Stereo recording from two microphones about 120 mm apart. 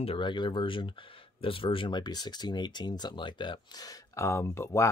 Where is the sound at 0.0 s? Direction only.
45° left (ahead or behind).